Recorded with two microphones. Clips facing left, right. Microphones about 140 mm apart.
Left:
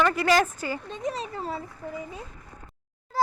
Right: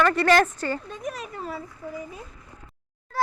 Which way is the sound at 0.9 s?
30° left (ahead or behind).